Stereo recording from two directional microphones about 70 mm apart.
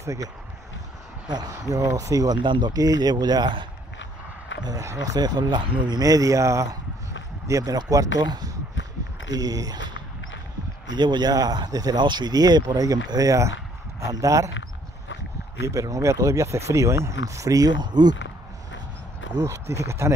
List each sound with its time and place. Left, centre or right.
0.0 s speech: right
1.5 s speech: right
4.8 s speech: right
9.3 s speech: right
10.9 s speech: right
15.6 s speech: right
19.4 s speech: right